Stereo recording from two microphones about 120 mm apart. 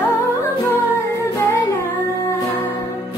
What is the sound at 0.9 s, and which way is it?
Music, 25° left (ahead or behind).